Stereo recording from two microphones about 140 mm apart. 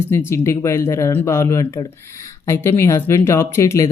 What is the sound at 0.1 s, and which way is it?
Speech, 20° left (ahead or behind).